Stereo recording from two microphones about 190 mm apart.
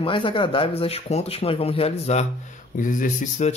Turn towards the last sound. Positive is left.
turn(degrees=40)  # may be behind; listen again after turning